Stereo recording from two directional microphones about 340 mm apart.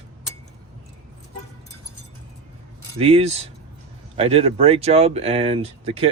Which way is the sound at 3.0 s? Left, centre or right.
Centre.